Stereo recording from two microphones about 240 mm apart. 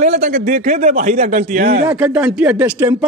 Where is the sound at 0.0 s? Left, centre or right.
Right.